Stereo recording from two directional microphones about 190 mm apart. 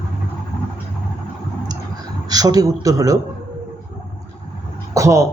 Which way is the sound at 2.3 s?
20° right (ahead or behind).